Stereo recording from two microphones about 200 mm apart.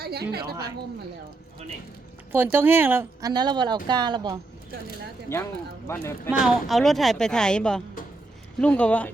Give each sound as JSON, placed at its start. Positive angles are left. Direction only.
{"t": 0.0, "sound": "a woman's voice", "side_deg": -50}
{"t": 2.3, "sound": "speech", "side_deg": -10}
{"t": 5.9, "sound": "speech", "side_deg": 15}
{"t": 6.3, "sound": "speech", "side_deg": 0}